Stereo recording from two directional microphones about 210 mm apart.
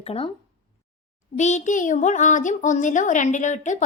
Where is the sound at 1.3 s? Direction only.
35° left (ahead or behind).